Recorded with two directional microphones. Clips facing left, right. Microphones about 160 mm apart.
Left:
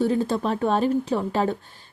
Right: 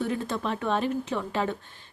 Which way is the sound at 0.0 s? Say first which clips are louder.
Left 7 dB; 30° left (ahead or behind).